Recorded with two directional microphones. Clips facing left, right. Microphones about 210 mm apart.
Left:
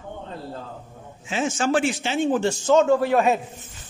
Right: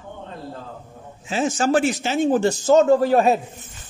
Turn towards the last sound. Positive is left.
turn(degrees=-35)  # may be behind; listen again after turning